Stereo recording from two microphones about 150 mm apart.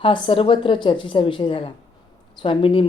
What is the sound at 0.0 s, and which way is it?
Speech, 35° left (ahead or behind).